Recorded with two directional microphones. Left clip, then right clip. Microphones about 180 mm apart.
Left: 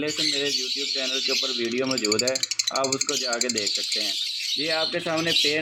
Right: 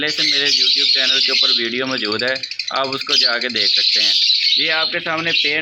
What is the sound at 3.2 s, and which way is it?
Speech, 5° right (ahead or behind).